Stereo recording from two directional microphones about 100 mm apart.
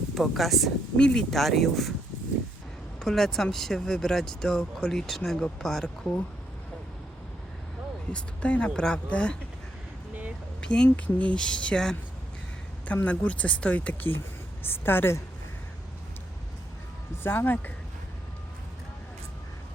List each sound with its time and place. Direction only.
0.1 s speech: centre (ahead or behind)
3.0 s speech: 5° left (ahead or behind)
8.1 s speech: 10° left (ahead or behind)
10.6 s speech: 10° left (ahead or behind)
13.1 s a woman's voice: 15° left (ahead or behind)
17.2 s a woman's voice: 20° left (ahead or behind)